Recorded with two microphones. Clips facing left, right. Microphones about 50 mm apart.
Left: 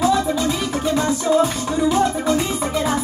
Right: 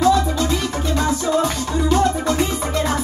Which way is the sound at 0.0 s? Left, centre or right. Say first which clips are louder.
Right 1 dB; centre.